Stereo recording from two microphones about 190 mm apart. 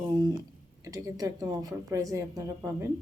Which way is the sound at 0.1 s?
20° right (ahead or behind).